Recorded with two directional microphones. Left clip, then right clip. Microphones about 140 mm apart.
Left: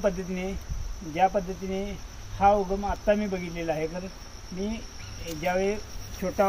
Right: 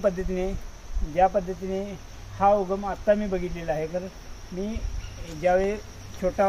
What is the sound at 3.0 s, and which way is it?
Speech, 15° right (ahead or behind).